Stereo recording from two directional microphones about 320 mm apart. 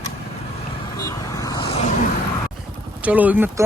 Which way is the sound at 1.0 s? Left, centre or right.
Centre.